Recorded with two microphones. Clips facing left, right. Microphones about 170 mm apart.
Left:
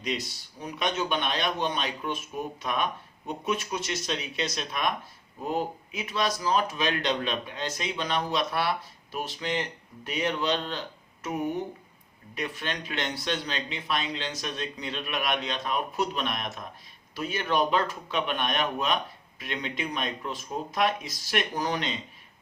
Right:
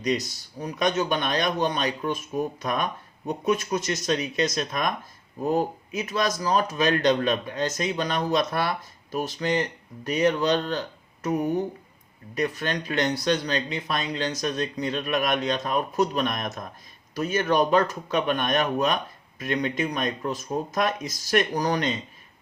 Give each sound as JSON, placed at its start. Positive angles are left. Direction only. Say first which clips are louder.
{"t": 0.0, "sound": "speech", "louder": "right 6 dB", "side_deg": -40}